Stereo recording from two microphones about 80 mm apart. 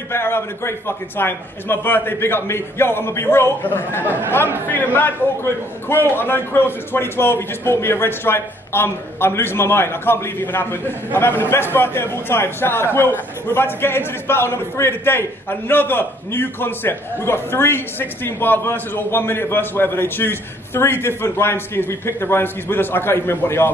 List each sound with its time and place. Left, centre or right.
0.1 s a man's voice: left